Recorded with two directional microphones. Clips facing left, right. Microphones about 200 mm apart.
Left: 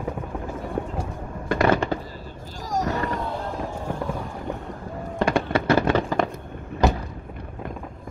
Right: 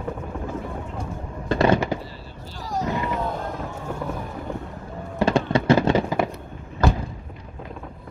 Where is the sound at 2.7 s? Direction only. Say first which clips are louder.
Left 1 dB; 45° left (ahead or behind).